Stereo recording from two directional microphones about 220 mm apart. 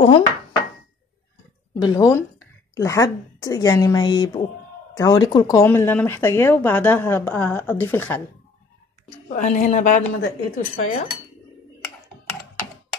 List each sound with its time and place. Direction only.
0.0 s speech: 25° left (ahead or behind)
1.9 s a woman's voice: 15° left (ahead or behind)
9.3 s cutlery: 35° left (ahead or behind)